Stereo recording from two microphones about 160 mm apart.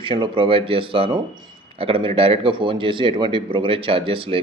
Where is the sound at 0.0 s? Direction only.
35° right (ahead or behind).